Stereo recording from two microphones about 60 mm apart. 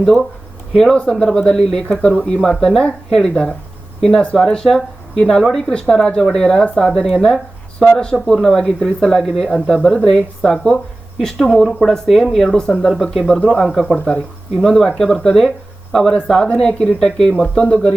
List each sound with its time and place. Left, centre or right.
0.0 s speech: centre